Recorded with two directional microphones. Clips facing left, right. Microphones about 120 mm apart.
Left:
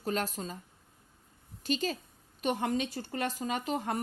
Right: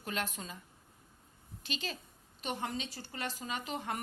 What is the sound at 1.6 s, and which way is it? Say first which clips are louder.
Speech: left 9 dB; 45° left (ahead or behind).